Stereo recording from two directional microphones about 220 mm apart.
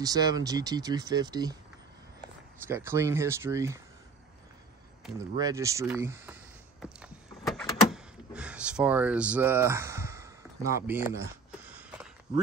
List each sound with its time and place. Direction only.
0.0 s speech: 15° right (ahead or behind)
2.6 s speech: 10° right (ahead or behind)
5.4 s speech: 15° right (ahead or behind)
6.8 s a sound: centre (ahead or behind)